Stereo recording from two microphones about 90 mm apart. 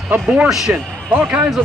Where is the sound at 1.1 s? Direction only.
20° right (ahead or behind).